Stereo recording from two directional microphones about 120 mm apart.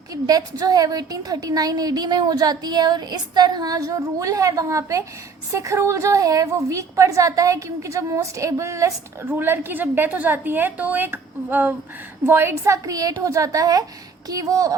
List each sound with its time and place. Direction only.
0.1 s a woman's voice: 30° right (ahead or behind)